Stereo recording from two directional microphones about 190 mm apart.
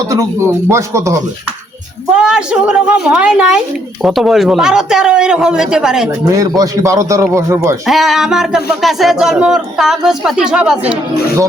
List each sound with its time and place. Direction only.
0.7 s a man's voice: 15° right (ahead or behind)
2.1 s speech: 5° right (ahead or behind)
6.1 s a man's voice: 15° right (ahead or behind)
7.9 s speech: centre (ahead or behind)